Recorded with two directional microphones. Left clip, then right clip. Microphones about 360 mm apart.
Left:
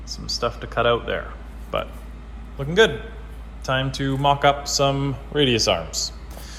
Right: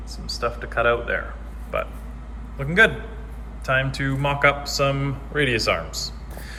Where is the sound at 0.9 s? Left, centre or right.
Left.